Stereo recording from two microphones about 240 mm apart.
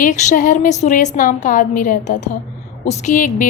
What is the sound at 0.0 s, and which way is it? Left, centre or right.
A woman's voice, left.